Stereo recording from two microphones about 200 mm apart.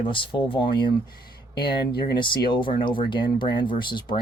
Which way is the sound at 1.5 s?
50° left (ahead or behind).